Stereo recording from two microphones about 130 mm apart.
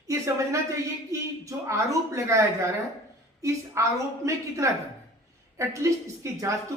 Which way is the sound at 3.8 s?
20° right (ahead or behind).